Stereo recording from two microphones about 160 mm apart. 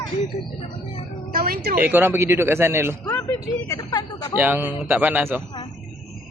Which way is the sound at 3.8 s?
25° left (ahead or behind).